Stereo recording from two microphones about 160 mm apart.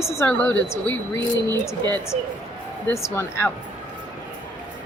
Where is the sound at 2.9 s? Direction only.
15° left (ahead or behind).